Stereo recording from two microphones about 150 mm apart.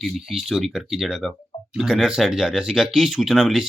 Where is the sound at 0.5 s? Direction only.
Centre (ahead or behind).